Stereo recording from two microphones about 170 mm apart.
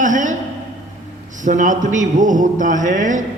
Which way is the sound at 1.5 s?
50° right (ahead or behind).